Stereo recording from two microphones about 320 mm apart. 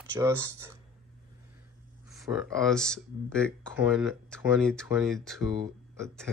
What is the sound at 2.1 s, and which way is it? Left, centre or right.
Speech, centre.